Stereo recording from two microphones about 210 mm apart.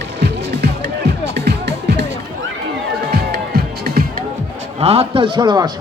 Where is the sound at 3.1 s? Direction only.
45° right (ahead or behind).